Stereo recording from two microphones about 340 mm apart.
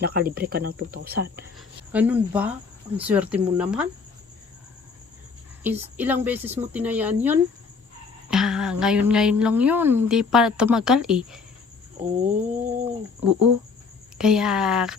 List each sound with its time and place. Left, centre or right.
0.0 s speech: right
1.5 s speech: centre
5.6 s speech: centre
12.2 s speech: right
14.2 s speech: centre